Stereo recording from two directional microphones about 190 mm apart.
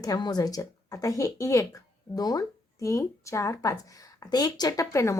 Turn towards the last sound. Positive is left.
turn(degrees=15)  # may be behind; listen again after turning